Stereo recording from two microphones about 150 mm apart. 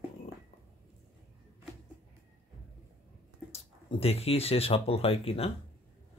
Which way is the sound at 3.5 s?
40° left (ahead or behind).